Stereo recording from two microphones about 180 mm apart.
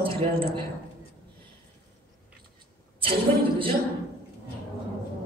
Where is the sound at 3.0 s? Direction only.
30° right (ahead or behind).